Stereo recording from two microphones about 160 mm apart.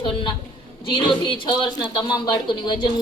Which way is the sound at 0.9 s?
30° left (ahead or behind).